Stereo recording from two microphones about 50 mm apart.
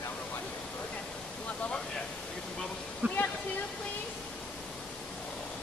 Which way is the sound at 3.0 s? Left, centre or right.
Right.